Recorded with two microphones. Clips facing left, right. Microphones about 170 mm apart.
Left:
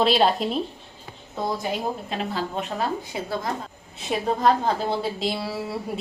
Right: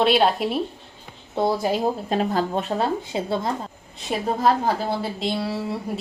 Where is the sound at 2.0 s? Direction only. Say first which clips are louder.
Right 6 dB; 40° right (ahead or behind).